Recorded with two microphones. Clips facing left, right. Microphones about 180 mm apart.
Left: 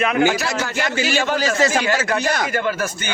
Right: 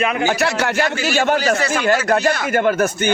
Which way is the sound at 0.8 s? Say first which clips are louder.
Right 1 dB; 50° right (ahead or behind).